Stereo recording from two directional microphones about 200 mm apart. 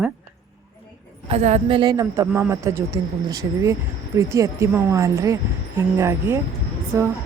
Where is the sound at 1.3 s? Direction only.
35° right (ahead or behind); by 7.1 s 15° right (ahead or behind).